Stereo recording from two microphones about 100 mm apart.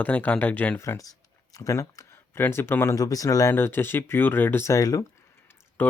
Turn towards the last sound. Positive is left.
turn(degrees=20)  # may be behind; listen again after turning